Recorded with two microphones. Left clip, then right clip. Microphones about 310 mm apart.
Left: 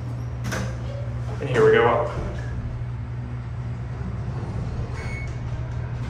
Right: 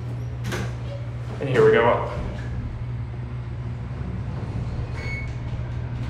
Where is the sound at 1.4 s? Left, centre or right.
Centre.